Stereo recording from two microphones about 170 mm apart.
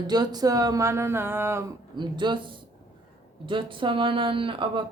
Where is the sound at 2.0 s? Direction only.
25° right (ahead or behind).